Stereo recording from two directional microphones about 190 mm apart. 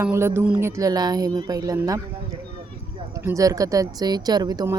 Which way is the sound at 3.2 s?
15° right (ahead or behind).